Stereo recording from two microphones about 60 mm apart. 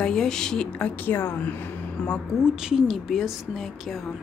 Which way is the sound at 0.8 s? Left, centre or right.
Left.